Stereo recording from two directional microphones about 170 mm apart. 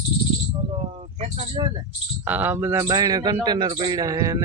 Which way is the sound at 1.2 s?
35° right (ahead or behind).